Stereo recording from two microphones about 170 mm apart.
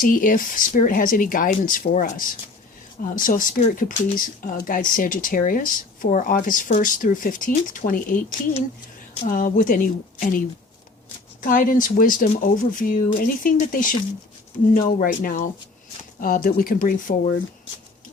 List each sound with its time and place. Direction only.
0.0 s speech: 55° left (ahead or behind)